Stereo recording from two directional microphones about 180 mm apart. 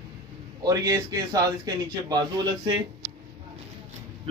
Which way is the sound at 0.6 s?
20° right (ahead or behind).